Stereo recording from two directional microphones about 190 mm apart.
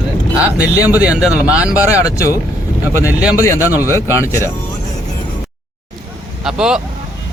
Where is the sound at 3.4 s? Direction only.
15° left (ahead or behind).